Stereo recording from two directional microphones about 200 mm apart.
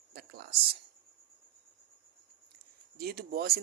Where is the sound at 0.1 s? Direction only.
50° right (ahead or behind).